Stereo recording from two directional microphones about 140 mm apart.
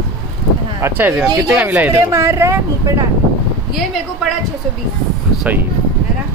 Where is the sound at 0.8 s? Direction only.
15° right (ahead or behind).